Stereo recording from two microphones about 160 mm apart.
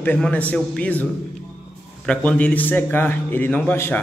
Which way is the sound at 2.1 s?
10° left (ahead or behind).